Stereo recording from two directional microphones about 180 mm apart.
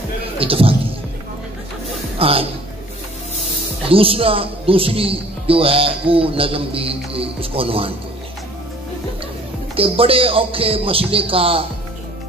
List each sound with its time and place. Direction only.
0.4 s a sound: 30° right (ahead or behind)
2.1 s speech: 30° right (ahead or behind)
3.9 s speech: 30° right (ahead or behind)
9.8 s speech: 30° right (ahead or behind)